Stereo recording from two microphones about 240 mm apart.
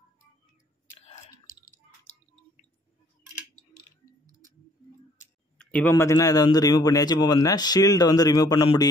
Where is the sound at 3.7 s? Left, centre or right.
Left.